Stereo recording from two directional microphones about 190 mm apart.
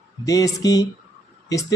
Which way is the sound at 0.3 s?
20° left (ahead or behind).